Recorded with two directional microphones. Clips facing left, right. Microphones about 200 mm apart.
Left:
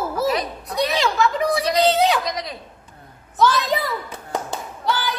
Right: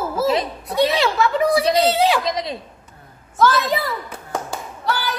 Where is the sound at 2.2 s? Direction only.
25° right (ahead or behind).